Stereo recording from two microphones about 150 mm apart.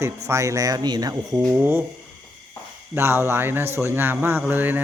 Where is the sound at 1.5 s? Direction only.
15° right (ahead or behind).